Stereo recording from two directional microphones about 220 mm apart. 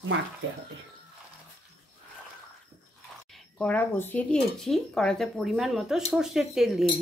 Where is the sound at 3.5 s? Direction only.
5° left (ahead or behind).